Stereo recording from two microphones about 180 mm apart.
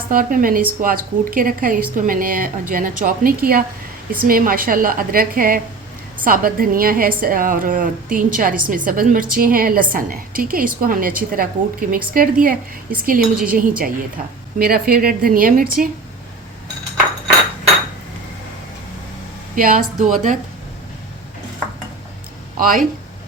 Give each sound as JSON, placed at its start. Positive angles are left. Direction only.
{"t": 0.1, "sound": "a woman's voice", "side_deg": -50}
{"t": 19.5, "sound": "a woman's voice", "side_deg": -50}
{"t": 22.5, "sound": "a woman's voice", "side_deg": -50}